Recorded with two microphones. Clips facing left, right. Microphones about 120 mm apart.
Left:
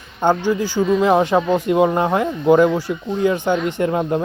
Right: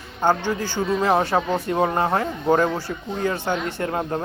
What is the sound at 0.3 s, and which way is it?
Speech, 15° left (ahead or behind).